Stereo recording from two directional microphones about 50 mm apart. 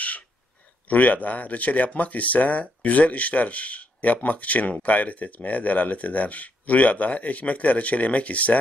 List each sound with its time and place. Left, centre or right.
0.8 s speech: left